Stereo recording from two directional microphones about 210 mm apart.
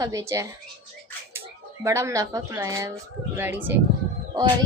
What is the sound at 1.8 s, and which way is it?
A woman's voice, 15° right (ahead or behind).